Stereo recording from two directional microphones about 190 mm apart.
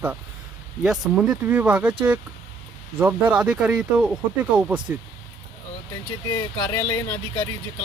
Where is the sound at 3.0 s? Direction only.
10° right (ahead or behind).